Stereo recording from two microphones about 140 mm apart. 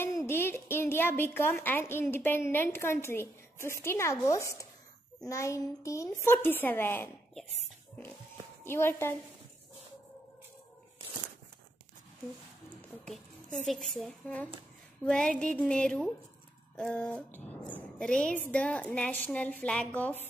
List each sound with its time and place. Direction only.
0.3 s a woman's voice: 15° left (ahead or behind)
8.6 s a woman's voice: 15° left (ahead or behind)
13.0 s a woman's voice: 5° left (ahead or behind)